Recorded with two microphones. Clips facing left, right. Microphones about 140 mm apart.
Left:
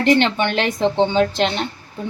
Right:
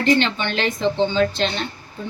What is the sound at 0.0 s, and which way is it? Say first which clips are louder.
Speech: left 3 dB; 65° left (ahead or behind).